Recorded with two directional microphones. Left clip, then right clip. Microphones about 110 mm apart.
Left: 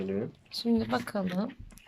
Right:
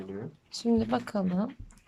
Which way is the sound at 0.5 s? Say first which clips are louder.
Right 1 dB; 15° right (ahead or behind).